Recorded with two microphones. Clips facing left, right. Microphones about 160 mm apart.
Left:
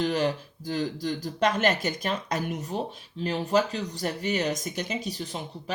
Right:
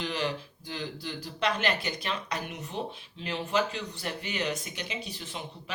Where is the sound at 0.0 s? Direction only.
45° left (ahead or behind).